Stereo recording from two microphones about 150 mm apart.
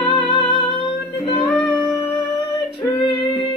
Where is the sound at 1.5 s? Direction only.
10° left (ahead or behind).